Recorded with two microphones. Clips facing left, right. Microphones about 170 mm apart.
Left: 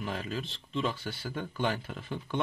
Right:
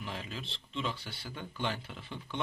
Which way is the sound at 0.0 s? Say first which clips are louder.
Left 6 dB; 45° left (ahead or behind).